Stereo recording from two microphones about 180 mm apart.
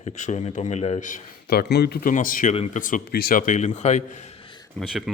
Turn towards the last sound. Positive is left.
turn(degrees=0)  # may be behind; listen again after turning